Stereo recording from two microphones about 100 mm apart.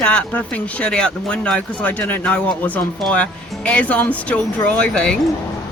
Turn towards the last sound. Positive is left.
turn(degrees=10)  # may be behind; listen again after turning